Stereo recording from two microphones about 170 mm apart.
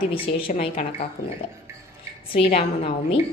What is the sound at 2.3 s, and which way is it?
Speech, 35° left (ahead or behind).